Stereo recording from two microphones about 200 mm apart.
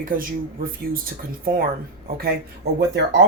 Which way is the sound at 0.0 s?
45° right (ahead or behind).